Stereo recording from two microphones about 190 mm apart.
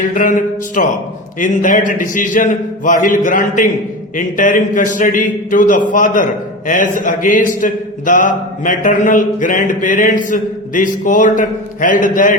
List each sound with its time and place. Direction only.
0.1 s speech: 45° left (ahead or behind)